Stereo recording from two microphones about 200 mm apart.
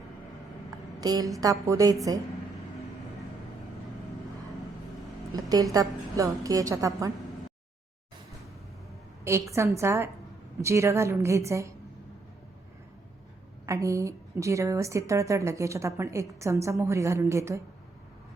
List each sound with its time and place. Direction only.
1.0 s a woman's voice: 20° right (ahead or behind)
5.4 s a sound: 20° right (ahead or behind)
5.7 s a woman's voice: 15° right (ahead or behind)
9.5 s a woman's voice: 15° right (ahead or behind)
13.7 s a woman's voice: 15° right (ahead or behind)